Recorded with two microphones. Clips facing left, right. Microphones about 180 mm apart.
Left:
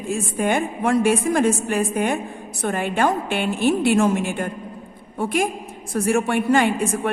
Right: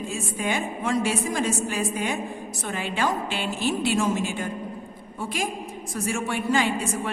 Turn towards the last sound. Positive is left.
turn(degrees=55)  # may be behind; listen again after turning